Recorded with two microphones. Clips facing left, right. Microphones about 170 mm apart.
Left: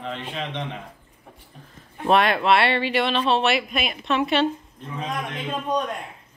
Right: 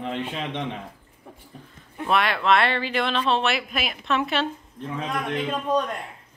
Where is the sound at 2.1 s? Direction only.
25° left (ahead or behind).